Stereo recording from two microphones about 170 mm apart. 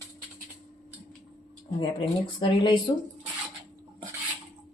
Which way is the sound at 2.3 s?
25° left (ahead or behind).